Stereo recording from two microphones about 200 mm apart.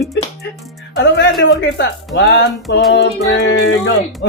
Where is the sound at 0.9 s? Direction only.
60° left (ahead or behind).